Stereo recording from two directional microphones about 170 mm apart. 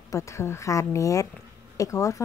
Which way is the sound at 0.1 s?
15° left (ahead or behind).